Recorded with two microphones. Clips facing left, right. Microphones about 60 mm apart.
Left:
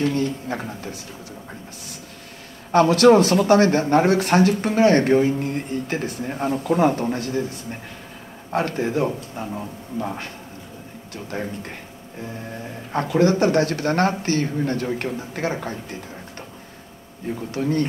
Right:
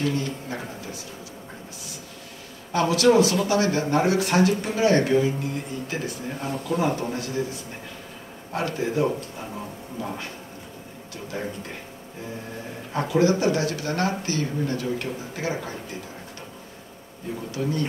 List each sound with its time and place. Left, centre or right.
0.0 s speech: left
2.7 s speech: left
11.3 s speech: left
13.1 s speech: left
17.5 s speech: left